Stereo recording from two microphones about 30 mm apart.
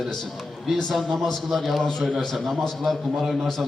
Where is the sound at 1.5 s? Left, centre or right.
Centre.